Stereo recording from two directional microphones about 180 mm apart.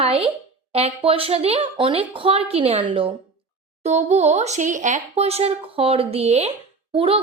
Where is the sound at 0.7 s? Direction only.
35° right (ahead or behind).